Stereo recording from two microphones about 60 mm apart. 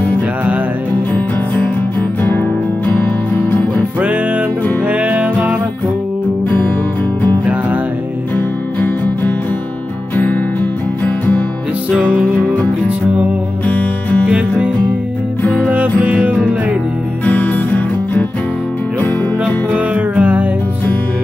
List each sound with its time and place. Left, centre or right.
3.4 s music: left
4.8 s music: right
8.8 s music: left
12.0 s music: right
13.7 s music: left
16.0 s music: right
17.3 s music: left
19.4 s music: centre